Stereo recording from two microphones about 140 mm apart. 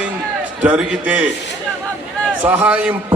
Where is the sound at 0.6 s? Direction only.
10° right (ahead or behind).